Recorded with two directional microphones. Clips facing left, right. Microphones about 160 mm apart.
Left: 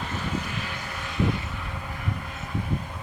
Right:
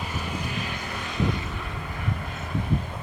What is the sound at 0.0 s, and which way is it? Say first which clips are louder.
Vehicle: left 1 dB; 10° right (ahead or behind).